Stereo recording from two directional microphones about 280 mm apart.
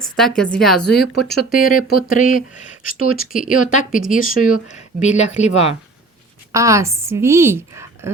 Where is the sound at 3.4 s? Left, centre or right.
Left.